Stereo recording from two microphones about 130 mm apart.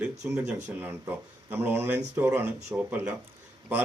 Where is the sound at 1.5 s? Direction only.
15° right (ahead or behind).